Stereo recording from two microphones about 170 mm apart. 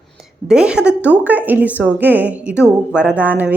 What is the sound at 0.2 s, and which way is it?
A woman's voice, 5° right (ahead or behind).